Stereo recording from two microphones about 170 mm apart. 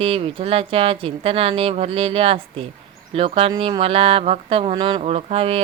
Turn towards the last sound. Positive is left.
turn(degrees=-35)  # may be behind; listen again after turning